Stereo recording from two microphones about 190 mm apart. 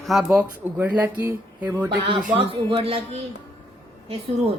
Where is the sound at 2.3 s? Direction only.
30° right (ahead or behind).